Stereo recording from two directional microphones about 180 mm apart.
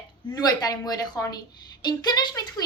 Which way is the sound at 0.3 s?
20° left (ahead or behind).